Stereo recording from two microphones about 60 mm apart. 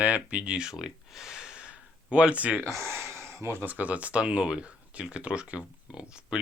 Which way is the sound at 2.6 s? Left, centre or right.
Right.